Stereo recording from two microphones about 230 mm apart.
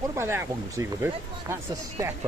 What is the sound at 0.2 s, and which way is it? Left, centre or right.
Speech, centre.